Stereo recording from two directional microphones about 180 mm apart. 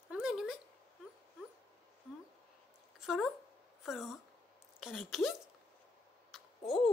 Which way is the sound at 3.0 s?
Centre (ahead or behind).